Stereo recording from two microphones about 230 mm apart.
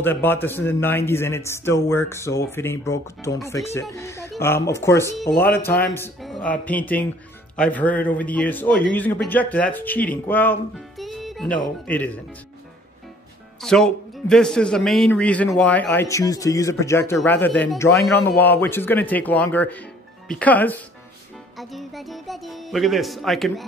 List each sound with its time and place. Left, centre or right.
0.0 s speech: centre
5.3 s speech: left
5.6 s speech: centre
13.6 s a man's voice: centre